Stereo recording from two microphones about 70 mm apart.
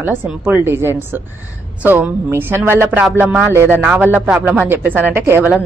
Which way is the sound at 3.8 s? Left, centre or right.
Right.